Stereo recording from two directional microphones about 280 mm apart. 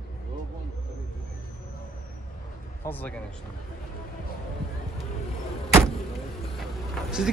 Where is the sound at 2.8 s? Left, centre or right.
Centre.